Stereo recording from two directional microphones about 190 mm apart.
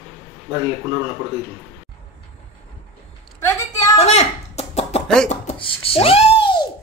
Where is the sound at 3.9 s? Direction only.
35° left (ahead or behind).